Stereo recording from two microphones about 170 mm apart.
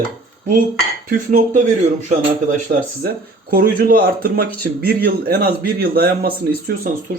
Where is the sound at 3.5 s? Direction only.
60° right (ahead or behind).